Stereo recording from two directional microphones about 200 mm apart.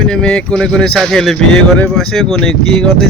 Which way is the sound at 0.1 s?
5° left (ahead or behind).